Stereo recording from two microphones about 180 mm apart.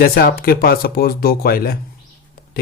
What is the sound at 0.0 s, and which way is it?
Speech, 55° left (ahead or behind).